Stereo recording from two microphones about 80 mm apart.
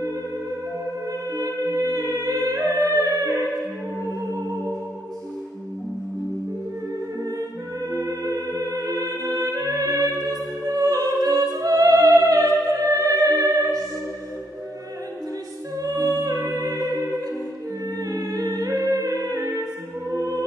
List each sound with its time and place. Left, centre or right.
1.3 s humming: right
3.1 s music: right
4.2 s music: right
7.2 s music: right
15.8 s music: right
17.8 s music: right